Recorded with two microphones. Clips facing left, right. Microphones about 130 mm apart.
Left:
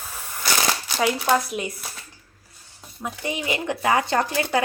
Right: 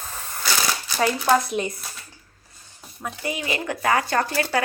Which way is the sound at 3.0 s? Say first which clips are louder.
Left 1 dB; 20° left (ahead or behind).